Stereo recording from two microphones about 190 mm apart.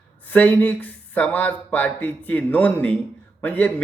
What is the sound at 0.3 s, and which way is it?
A man's voice, 10° left (ahead or behind).